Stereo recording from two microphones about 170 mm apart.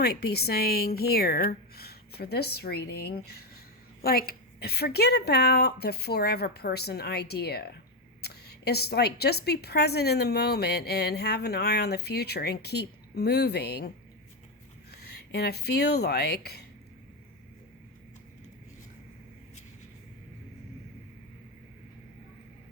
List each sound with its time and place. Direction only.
0.0 s a woman's voice: 70° left (ahead or behind)
14.9 s speech: 70° left (ahead or behind)